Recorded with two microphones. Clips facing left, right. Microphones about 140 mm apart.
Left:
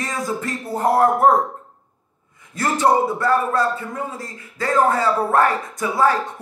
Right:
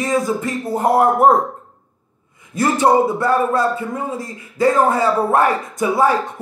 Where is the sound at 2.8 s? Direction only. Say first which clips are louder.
Right 2 dB; 15° right (ahead or behind).